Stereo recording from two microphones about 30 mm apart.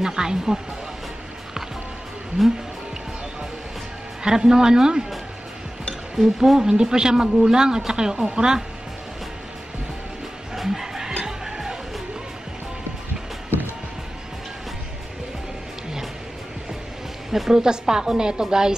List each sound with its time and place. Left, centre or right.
0.0 s speech: right
4.2 s speech: right
6.1 s speech: centre
6.6 s speech: right
10.5 s chicken: centre
11.2 s music: centre
17.3 s speech: centre